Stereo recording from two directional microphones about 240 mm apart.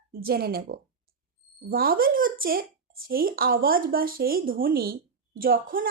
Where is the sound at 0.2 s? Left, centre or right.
Right.